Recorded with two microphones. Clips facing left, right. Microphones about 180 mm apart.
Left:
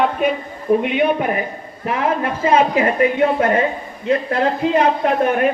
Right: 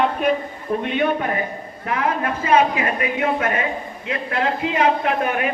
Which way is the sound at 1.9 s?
25° left (ahead or behind).